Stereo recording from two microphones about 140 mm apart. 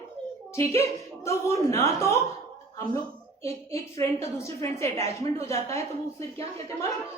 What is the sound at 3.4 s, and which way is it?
A woman's voice, 20° left (ahead or behind).